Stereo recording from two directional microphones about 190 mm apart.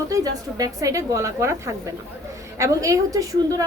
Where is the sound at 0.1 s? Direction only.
20° right (ahead or behind).